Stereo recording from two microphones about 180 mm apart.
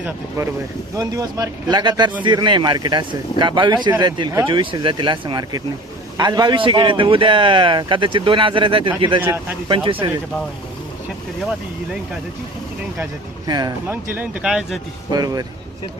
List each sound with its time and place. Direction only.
0.9 s a man's voice: 20° right (ahead or behind)
13.5 s a man's voice: 20° right (ahead or behind)
13.8 s speech: 10° right (ahead or behind)
15.1 s a man's voice: 20° right (ahead or behind)